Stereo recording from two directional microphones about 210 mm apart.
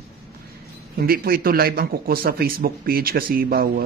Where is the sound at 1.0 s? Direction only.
45° right (ahead or behind).